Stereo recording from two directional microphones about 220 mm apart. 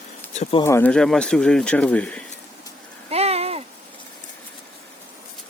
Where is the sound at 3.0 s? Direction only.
30° right (ahead or behind).